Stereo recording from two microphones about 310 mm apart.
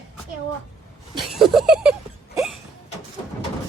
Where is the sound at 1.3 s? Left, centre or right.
Centre.